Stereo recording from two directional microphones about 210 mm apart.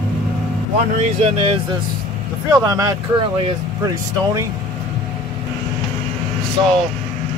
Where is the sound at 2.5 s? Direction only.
15° right (ahead or behind).